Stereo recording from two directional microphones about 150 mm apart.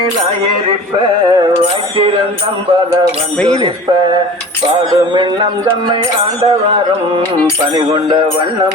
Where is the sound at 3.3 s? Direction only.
5° left (ahead or behind).